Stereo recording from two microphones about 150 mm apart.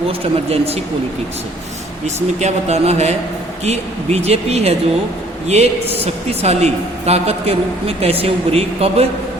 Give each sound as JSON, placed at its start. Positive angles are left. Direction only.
{"t": 0.5, "sound": "speech", "side_deg": -40}
{"t": 2.4, "sound": "a woman's voice", "side_deg": -45}